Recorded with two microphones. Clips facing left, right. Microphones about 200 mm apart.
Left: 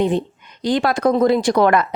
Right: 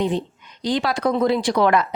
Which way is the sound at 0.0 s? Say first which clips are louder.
Left 4 dB; 55° left (ahead or behind).